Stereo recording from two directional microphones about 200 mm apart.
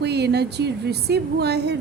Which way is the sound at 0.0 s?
55° right (ahead or behind).